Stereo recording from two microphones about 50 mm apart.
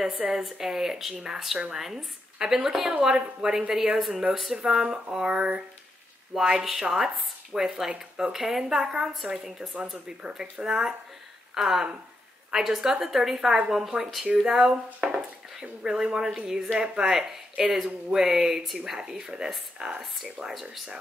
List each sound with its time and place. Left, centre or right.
0.3 s a woman's voice: centre
5.1 s a sound: centre
6.3 s a woman's voice: centre
6.6 s a woman's voice: centre
15.0 s a sound: centre
15.8 s a woman's voice: centre